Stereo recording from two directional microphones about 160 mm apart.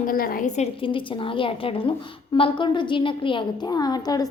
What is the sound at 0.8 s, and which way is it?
A woman's voice, 30° left (ahead or behind).